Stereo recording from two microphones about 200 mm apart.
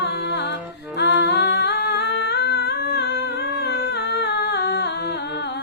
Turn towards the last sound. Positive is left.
turn(degrees=55)  # may be behind; listen again after turning